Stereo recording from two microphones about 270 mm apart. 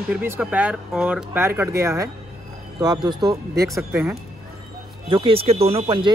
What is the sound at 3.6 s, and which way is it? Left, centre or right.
Speech, centre.